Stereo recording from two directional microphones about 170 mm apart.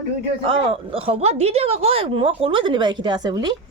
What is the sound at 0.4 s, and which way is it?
A woman's voice, 30° right (ahead or behind).